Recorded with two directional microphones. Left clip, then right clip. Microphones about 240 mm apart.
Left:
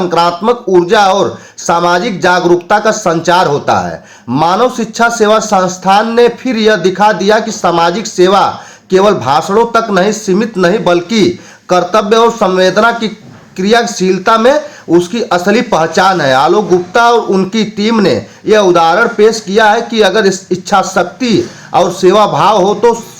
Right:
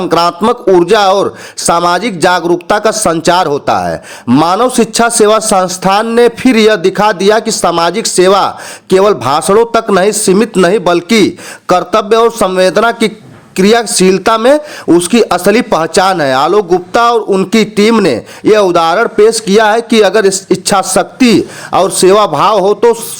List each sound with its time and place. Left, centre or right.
0.1 s speech: right